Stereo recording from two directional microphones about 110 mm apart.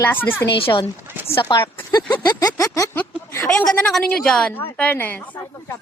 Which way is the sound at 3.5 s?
10° left (ahead or behind).